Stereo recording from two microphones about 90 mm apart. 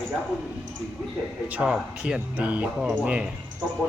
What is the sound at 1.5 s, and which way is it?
A man's voice, 15° right (ahead or behind).